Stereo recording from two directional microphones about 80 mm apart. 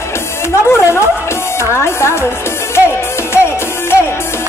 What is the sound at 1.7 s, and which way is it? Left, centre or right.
Music, left.